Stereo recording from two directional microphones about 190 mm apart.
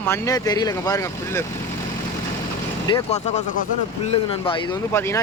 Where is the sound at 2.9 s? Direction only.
25° left (ahead or behind).